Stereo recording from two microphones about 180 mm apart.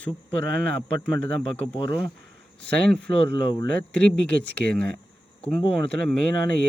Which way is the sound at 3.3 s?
25° left (ahead or behind).